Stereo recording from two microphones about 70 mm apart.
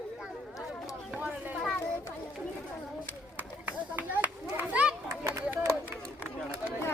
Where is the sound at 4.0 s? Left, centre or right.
Right.